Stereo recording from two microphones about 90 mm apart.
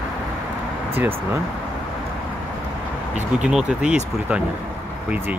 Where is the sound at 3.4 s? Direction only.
10° right (ahead or behind).